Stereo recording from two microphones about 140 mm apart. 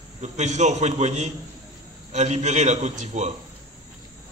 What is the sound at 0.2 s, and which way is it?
A man's voice, 55° right (ahead or behind).